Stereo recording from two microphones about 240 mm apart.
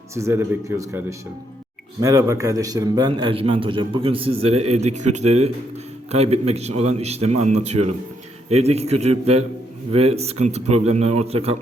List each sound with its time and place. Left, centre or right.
0.1 s a man's voice: centre